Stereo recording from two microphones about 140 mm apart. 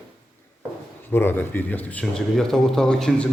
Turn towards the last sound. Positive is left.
turn(degrees=5)  # may be behind; listen again after turning